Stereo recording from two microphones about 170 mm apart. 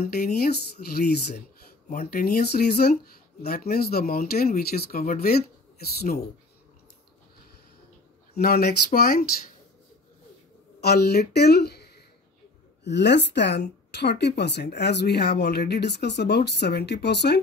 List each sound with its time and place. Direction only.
0.0 s speech: 65° left (ahead or behind)
1.9 s speech: 55° left (ahead or behind)
8.4 s speech: 65° left (ahead or behind)
10.8 s speech: 70° left (ahead or behind)
12.8 s speech: 90° left